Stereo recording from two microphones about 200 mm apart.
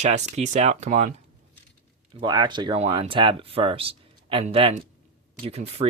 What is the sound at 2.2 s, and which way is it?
Speech, 20° right (ahead or behind).